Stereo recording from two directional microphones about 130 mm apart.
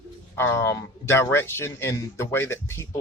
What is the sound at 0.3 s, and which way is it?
Speech, 20° left (ahead or behind).